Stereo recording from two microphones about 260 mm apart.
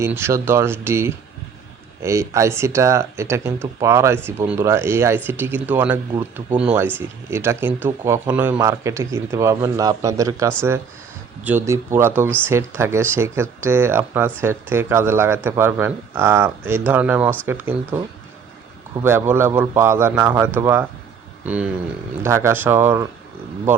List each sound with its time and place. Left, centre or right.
0.0 s speech: centre
19.0 s speech: centre